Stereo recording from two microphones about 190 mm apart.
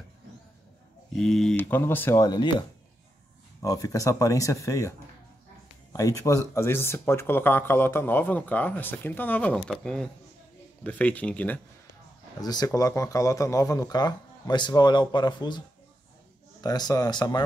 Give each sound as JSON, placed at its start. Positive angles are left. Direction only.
{"t": 1.1, "sound": "speech", "side_deg": 5}
{"t": 3.6, "sound": "speech", "side_deg": 20}
{"t": 5.9, "sound": "speech", "side_deg": 15}
{"t": 12.4, "sound": "speech", "side_deg": 20}
{"t": 16.6, "sound": "speech", "side_deg": 20}